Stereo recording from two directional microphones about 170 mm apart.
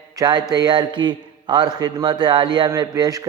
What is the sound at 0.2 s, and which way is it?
A man's voice, 25° right (ahead or behind).